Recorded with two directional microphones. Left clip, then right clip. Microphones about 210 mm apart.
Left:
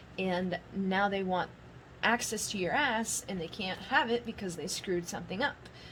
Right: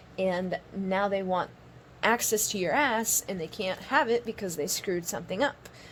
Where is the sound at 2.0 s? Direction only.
35° right (ahead or behind).